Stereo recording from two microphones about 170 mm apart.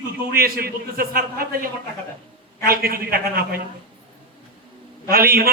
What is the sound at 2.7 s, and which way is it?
Speech, 60° right (ahead or behind).